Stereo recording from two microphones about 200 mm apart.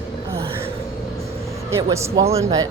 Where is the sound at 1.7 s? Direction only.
15° right (ahead or behind).